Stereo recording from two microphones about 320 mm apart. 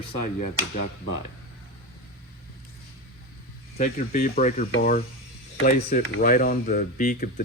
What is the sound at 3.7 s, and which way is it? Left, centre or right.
Speech, left.